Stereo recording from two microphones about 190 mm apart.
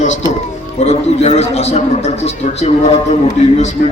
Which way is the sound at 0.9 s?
35° left (ahead or behind).